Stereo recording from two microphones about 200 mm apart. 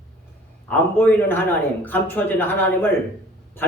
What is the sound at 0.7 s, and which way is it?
A man's voice, 10° left (ahead or behind).